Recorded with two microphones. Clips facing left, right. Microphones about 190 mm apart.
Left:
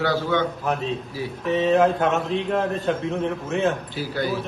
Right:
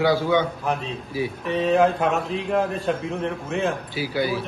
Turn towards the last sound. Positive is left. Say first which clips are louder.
# right 1 dB
turn(degrees=-10)  # may be behind; listen again after turning